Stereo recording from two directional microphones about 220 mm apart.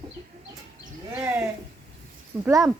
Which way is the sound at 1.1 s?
10° right (ahead or behind).